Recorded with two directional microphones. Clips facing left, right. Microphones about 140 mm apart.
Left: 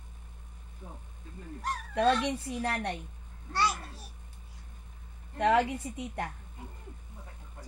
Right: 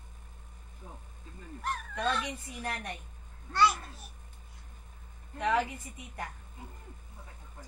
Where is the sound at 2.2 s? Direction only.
75° left (ahead or behind).